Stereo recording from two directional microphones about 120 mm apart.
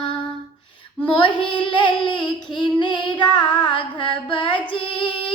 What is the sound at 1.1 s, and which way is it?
Child singing, 45° left (ahead or behind).